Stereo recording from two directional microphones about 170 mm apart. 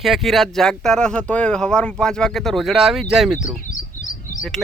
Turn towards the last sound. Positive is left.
turn(degrees=50)  # may be behind; listen again after turning